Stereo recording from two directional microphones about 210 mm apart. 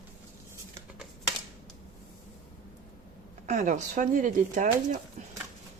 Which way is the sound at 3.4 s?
35° right (ahead or behind).